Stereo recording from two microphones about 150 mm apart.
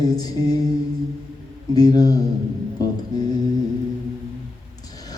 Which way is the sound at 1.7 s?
25° left (ahead or behind).